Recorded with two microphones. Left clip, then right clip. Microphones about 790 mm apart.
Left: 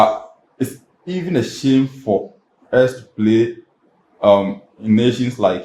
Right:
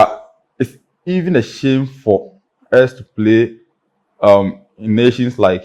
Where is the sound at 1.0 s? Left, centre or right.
Right.